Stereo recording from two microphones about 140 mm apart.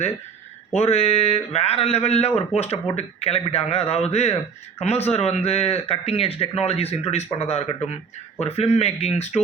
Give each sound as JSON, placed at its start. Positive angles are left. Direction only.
{"t": 0.7, "sound": "speech", "side_deg": 50}